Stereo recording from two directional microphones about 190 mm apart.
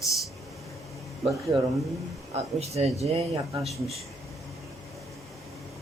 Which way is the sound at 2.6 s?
35° right (ahead or behind).